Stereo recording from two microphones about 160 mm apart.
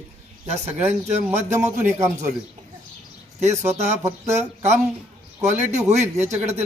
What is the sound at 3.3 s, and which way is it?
A man's voice, 45° right (ahead or behind).